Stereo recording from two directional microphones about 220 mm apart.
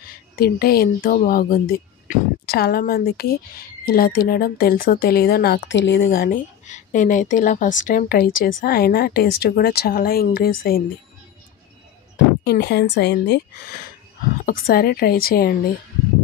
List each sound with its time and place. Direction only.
0.0 s speech: 40° left (ahead or behind)
12.4 s speech: 50° left (ahead or behind)